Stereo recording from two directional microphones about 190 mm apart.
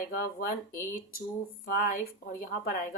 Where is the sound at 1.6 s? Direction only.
50° left (ahead or behind).